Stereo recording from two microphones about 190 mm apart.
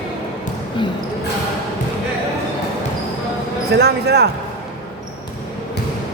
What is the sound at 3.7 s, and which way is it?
Speech, 60° right (ahead or behind).